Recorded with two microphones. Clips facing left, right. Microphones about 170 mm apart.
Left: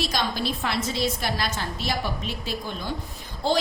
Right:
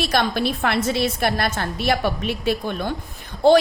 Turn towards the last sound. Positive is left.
turn(degrees=-60)  # may be behind; listen again after turning